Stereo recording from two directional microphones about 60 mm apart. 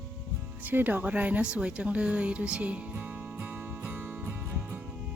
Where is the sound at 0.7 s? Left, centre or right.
Right.